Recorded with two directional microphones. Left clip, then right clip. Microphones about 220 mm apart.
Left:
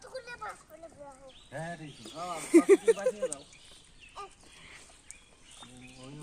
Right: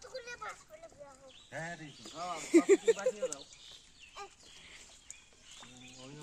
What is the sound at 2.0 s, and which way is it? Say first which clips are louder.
Speech: left 2 dB; centre (ahead or behind).